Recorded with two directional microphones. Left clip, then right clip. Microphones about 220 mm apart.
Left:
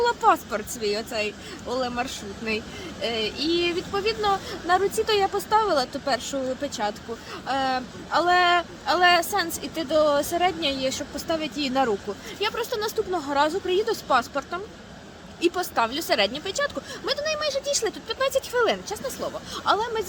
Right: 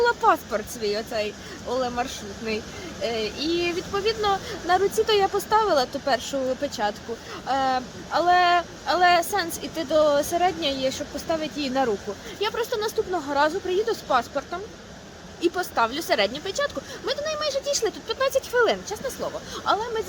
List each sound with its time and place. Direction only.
0.0 s speech: centre (ahead or behind); by 20.0 s 20° left (ahead or behind)